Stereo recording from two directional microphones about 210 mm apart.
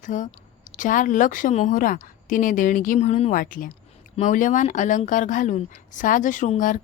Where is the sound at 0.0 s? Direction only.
35° left (ahead or behind).